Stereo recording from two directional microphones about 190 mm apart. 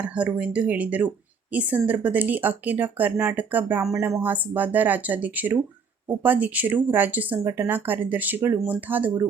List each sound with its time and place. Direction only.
0.0 s speech: 5° right (ahead or behind)